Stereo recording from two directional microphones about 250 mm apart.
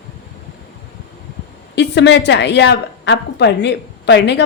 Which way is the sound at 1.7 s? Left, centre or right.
Left.